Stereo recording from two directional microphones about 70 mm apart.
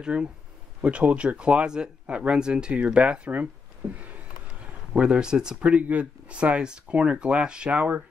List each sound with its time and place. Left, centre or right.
0.0 s speech: centre
4.9 s speech: centre